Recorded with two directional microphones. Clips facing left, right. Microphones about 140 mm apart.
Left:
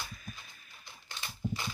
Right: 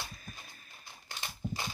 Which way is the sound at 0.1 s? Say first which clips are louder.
Left 1 dB; 35° right (ahead or behind).